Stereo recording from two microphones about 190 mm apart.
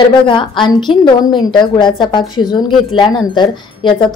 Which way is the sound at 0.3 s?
25° left (ahead or behind).